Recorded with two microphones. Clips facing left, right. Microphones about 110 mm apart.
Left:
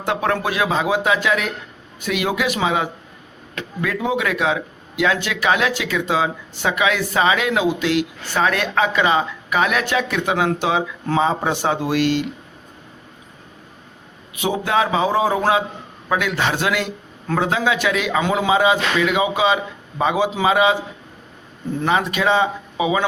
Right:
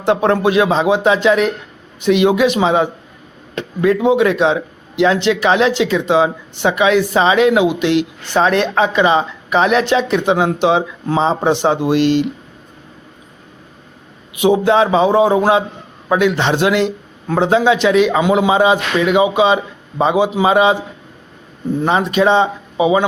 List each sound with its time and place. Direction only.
0.0 s speech: 25° right (ahead or behind)
14.4 s speech: 25° right (ahead or behind)